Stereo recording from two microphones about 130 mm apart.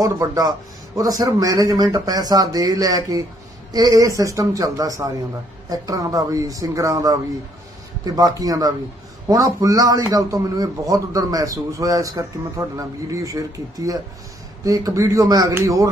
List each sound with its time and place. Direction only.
0.0 s a man's voice: 25° right (ahead or behind)